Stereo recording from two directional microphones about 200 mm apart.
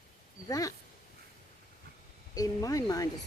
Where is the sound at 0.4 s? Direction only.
20° left (ahead or behind).